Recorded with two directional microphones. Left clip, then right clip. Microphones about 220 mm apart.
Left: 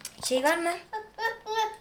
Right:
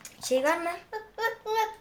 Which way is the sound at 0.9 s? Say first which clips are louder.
Even; 35° right (ahead or behind).